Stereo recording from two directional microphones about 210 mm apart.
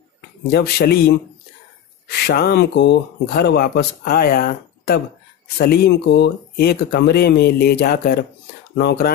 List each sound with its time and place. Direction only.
0.4 s speech: 50° left (ahead or behind)